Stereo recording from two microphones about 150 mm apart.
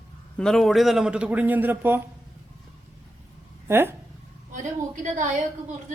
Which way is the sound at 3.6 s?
15° right (ahead or behind).